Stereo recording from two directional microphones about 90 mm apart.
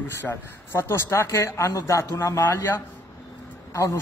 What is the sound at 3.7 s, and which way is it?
Speech, 35° left (ahead or behind).